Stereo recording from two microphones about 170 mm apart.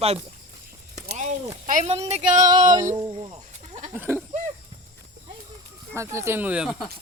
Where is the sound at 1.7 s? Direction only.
45° right (ahead or behind).